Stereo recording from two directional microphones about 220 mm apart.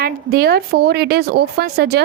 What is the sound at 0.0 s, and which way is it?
A woman's voice, 45° right (ahead or behind).